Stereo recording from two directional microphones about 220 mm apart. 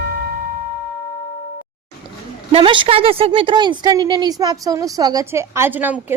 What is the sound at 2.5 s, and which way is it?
A woman's voice, 25° right (ahead or behind).